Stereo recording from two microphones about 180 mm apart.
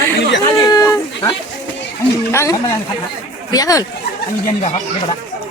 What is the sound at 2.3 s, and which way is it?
Speech, 15° left (ahead or behind).